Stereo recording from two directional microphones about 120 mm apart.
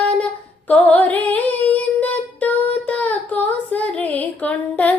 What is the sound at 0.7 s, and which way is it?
Female singing, 15° left (ahead or behind).